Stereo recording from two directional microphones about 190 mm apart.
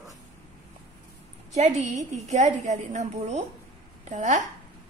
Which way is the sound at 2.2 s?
35° right (ahead or behind).